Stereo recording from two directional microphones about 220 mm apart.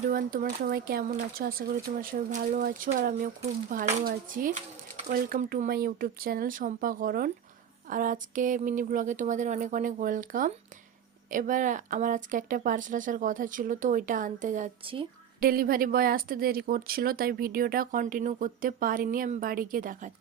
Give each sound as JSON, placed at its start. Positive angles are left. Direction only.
{"t": 0.1, "sound": "speech", "side_deg": -40}
{"t": 15.4, "sound": "speech", "side_deg": -40}